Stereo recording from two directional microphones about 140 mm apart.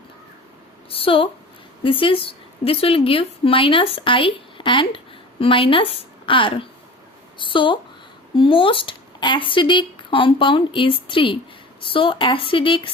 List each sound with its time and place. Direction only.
0.9 s a woman's voice: 40° left (ahead or behind)